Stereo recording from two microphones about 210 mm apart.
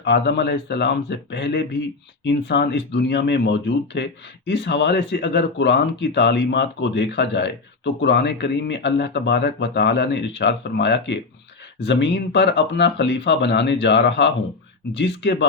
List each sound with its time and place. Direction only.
0.0 s speech: 55° left (ahead or behind)